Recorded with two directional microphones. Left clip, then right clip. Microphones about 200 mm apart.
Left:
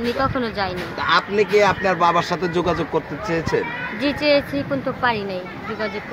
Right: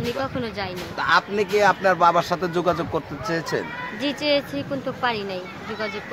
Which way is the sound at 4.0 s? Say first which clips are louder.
Left 4 dB; 10° right (ahead or behind).